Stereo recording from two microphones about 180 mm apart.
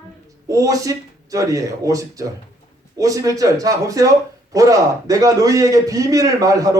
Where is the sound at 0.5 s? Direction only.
20° right (ahead or behind).